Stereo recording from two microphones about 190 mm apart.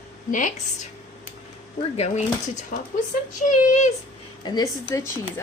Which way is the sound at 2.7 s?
40° left (ahead or behind).